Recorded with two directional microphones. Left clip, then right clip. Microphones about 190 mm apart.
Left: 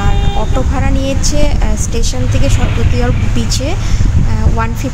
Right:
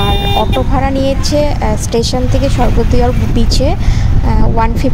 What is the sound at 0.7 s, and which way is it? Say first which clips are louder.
A woman's voice: right 6 dB; 25° right (ahead or behind).